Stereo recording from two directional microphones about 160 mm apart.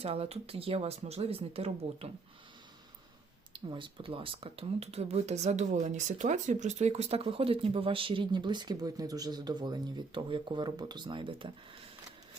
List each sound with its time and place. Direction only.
0.0 s speech: 40° right (ahead or behind)
3.5 s speech: 30° right (ahead or behind)